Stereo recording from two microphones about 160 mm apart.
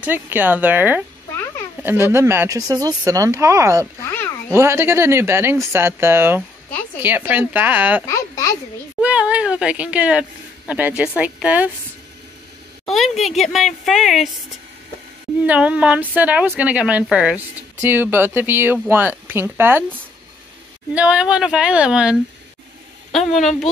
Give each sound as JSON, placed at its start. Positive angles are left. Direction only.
{"t": 0.0, "sound": "a woman's voice", "side_deg": -10}
{"t": 4.0, "sound": "a sound", "side_deg": 15}
{"t": 4.5, "sound": "a woman's voice", "side_deg": -15}
{"t": 8.1, "sound": "a sound", "side_deg": 20}
{"t": 9.0, "sound": "a sound", "side_deg": -10}
{"t": 10.7, "sound": "a woman's voice", "side_deg": -10}
{"t": 12.8, "sound": "speech", "side_deg": 0}
{"t": 15.4, "sound": "a woman's voice", "side_deg": -10}
{"t": 20.9, "sound": "speech", "side_deg": -5}
{"t": 23.1, "sound": "speech", "side_deg": 0}